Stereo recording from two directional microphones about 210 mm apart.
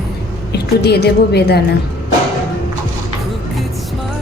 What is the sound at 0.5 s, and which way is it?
A woman's voice, 50° left (ahead or behind).